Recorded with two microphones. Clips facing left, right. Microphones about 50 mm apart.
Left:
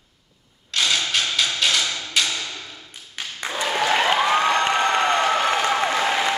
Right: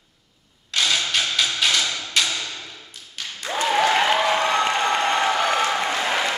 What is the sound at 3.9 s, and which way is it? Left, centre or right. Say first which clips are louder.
Applause: even; left.